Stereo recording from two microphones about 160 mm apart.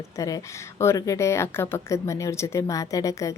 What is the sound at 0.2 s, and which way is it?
A woman's voice, 20° left (ahead or behind).